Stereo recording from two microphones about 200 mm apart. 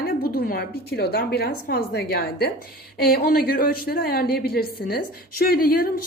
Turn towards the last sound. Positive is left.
turn(degrees=50)  # may be behind; listen again after turning